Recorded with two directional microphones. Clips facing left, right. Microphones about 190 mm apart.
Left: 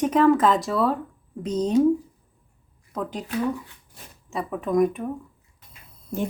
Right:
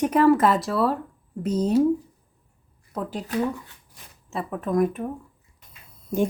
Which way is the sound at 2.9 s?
5° right (ahead or behind).